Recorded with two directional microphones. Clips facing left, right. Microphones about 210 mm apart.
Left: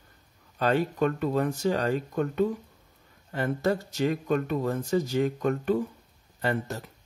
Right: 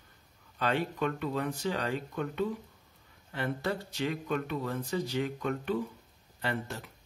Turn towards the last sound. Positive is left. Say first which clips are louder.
# left 6 dB
turn(degrees=40)  # may be behind; listen again after turning